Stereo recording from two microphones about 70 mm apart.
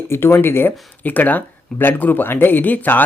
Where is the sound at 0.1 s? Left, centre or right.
Left.